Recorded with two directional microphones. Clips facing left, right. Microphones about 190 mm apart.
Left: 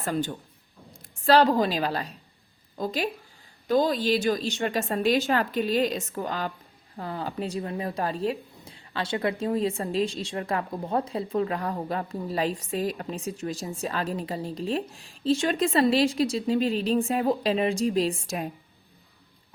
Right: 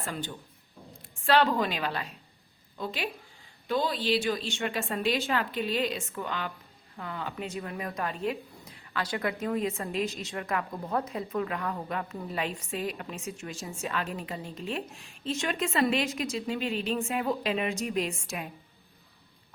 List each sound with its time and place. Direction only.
0.0 s a woman's voice: 45° left (ahead or behind)